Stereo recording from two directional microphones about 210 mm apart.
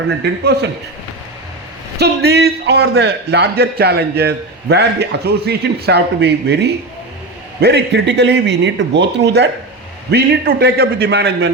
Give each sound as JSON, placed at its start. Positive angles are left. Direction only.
{"t": 0.2, "sound": "a man's voice", "side_deg": -50}
{"t": 2.0, "sound": "a man's voice", "side_deg": -50}